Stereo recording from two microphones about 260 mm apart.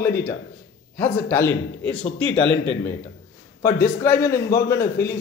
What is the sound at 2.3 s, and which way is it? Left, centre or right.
Speech, left.